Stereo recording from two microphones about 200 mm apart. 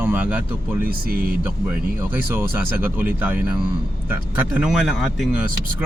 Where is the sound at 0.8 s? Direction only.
45° right (ahead or behind).